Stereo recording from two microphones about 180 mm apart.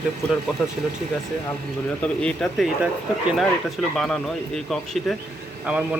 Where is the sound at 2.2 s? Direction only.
5° left (ahead or behind).